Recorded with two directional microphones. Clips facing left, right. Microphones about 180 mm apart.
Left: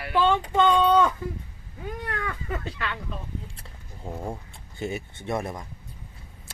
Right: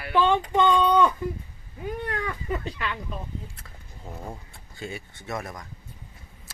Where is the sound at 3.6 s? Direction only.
25° left (ahead or behind).